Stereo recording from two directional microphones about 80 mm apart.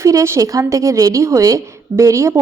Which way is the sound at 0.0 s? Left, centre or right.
Right.